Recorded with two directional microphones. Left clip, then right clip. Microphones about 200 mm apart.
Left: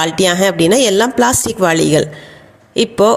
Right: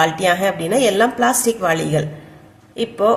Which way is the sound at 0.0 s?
45° left (ahead or behind).